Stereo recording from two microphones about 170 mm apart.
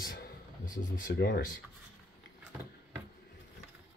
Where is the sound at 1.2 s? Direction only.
75° left (ahead or behind).